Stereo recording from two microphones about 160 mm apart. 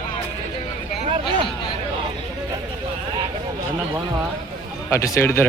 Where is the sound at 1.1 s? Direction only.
35° right (ahead or behind).